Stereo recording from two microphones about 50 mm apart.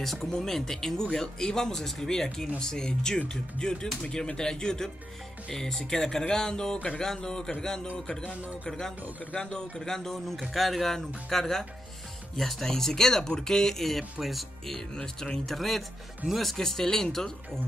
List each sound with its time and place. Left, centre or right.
0.0 s speech: centre
15.0 s speech: centre
15.4 s speech: centre